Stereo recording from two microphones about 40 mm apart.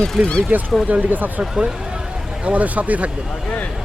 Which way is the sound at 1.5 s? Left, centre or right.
Centre.